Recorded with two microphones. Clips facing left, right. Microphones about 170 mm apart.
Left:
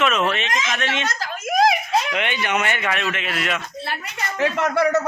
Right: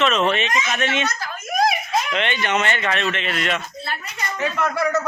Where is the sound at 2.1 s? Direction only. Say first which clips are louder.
Right 1 dB; 10° left (ahead or behind).